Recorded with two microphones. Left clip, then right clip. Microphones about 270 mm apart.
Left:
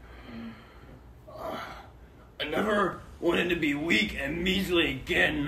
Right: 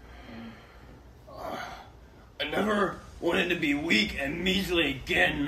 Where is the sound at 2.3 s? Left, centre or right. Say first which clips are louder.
Even; centre.